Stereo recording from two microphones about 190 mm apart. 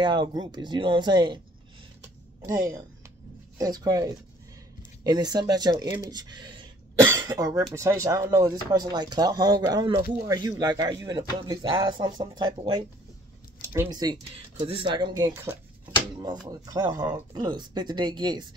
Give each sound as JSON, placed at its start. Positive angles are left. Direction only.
{"t": 0.0, "sound": "speech", "side_deg": -25}
{"t": 2.4, "sound": "speech", "side_deg": -20}